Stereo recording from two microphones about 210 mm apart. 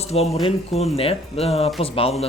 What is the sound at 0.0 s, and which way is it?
Speech, 30° left (ahead or behind).